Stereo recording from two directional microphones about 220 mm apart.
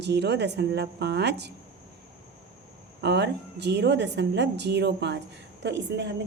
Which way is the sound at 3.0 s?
50° right (ahead or behind).